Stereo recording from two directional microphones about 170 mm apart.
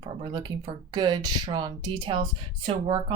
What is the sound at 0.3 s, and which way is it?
Speech, 25° right (ahead or behind).